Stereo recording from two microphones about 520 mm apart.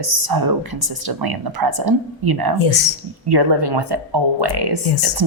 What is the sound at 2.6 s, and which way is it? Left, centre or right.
Speech, left.